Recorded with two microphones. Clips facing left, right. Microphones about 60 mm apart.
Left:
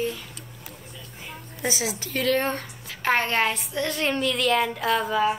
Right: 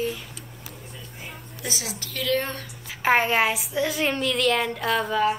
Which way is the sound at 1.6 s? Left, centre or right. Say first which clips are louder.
Left 5 dB; left.